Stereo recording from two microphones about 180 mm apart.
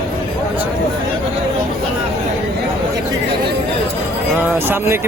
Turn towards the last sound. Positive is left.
turn(degrees=-15)  # may be behind; listen again after turning